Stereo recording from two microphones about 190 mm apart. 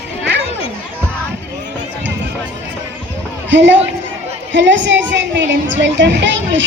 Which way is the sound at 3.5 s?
70° right (ahead or behind).